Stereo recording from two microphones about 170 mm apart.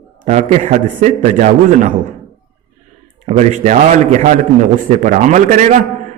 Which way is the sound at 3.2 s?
45° right (ahead or behind).